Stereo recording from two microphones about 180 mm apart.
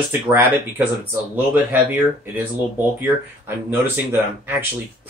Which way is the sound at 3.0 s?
10° right (ahead or behind).